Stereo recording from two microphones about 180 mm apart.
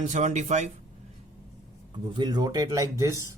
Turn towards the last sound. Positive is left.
turn(degrees=-15)  # may be behind; listen again after turning